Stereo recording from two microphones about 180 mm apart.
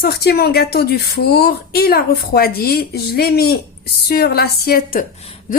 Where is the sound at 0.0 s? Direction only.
60° left (ahead or behind).